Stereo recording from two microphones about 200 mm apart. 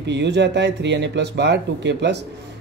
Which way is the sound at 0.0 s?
60° right (ahead or behind).